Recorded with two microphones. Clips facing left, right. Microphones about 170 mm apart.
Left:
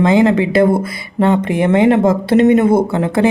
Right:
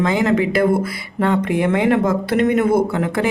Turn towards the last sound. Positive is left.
turn(degrees=25)  # may be behind; listen again after turning